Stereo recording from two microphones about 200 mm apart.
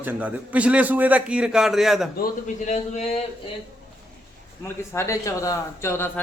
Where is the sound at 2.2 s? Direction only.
40° left (ahead or behind).